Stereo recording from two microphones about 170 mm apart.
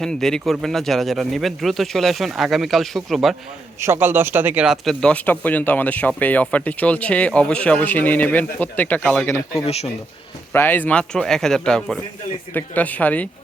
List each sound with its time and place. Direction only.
0.0 s a man's voice: 5° left (ahead or behind)
3.8 s speech: 15° right (ahead or behind); by 9.4 s 10° left (ahead or behind)
9.6 s speech: 40° left (ahead or behind)
10.5 s a man's voice: 10° left (ahead or behind)